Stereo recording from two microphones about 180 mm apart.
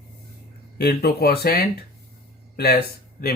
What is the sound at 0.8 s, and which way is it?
Speech, 60° left (ahead or behind).